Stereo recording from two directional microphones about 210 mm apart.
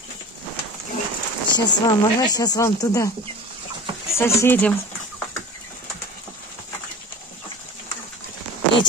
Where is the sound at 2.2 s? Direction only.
20° left (ahead or behind).